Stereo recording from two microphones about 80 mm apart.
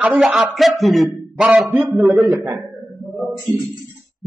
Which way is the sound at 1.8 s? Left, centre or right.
Centre.